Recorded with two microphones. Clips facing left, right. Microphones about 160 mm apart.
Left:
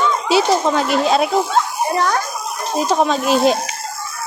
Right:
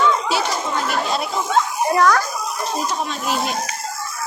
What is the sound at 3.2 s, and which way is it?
Speech, 25° left (ahead or behind).